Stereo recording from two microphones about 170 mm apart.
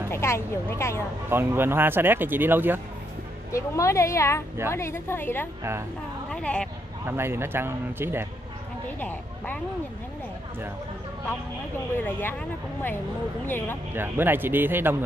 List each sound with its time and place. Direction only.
0.1 s speech: 15° left (ahead or behind)
1.3 s speech: 15° right (ahead or behind)
3.5 s speech: 15° left (ahead or behind)
5.6 s speech: 15° right (ahead or behind)
6.3 s speech: 5° left (ahead or behind)
7.1 s speech: 15° right (ahead or behind)
12.0 s speech: 10° left (ahead or behind)
13.5 s speech: 15° left (ahead or behind)
13.9 s speech: 10° right (ahead or behind)